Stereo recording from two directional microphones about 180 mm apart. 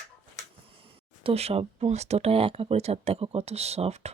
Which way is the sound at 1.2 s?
35° right (ahead or behind).